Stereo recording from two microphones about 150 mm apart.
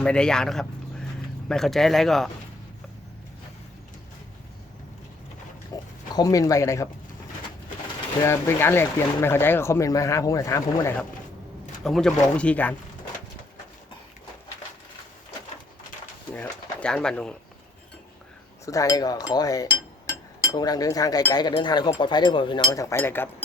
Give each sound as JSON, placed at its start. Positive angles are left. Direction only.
{"t": 0.0, "sound": "speech", "side_deg": 5}
{"t": 5.7, "sound": "speech", "side_deg": 25}
{"t": 8.2, "sound": "speech", "side_deg": 15}
{"t": 11.8, "sound": "speech", "side_deg": 5}
{"t": 16.3, "sound": "pigeon", "side_deg": 10}
{"t": 18.6, "sound": "speech", "side_deg": 20}
{"t": 22.7, "sound": "speech", "side_deg": 20}